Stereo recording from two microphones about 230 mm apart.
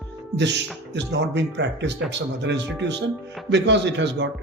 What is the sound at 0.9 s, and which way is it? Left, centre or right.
Speech, right.